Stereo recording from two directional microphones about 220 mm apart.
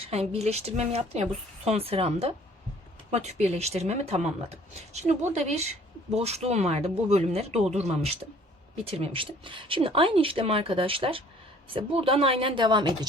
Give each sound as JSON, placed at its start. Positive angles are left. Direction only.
{"t": 0.0, "sound": "speech", "side_deg": -30}